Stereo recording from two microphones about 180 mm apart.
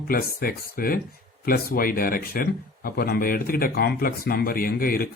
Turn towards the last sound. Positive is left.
turn(degrees=55)  # may be behind; listen again after turning